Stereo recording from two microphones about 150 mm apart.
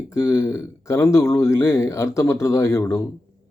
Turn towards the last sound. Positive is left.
turn(degrees=20)  # may be behind; listen again after turning